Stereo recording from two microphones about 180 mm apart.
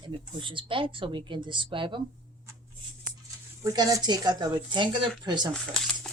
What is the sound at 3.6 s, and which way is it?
A woman's voice, 20° right (ahead or behind).